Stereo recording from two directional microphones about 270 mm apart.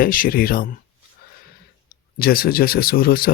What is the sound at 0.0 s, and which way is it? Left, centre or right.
Mantra, left.